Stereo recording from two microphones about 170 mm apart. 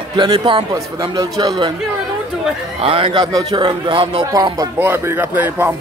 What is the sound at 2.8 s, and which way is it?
A man's voice, 30° right (ahead or behind).